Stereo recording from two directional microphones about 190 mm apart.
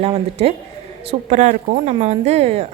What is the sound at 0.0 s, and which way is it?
Speech, 30° right (ahead or behind).